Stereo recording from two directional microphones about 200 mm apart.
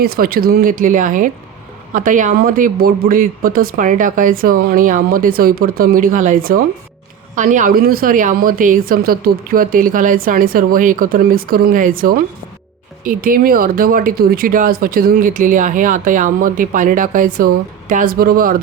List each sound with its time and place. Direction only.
0.0 s a woman's voice: 50° right (ahead or behind)